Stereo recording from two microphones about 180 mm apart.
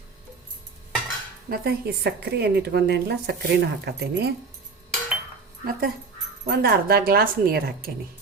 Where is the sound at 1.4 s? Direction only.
60° right (ahead or behind).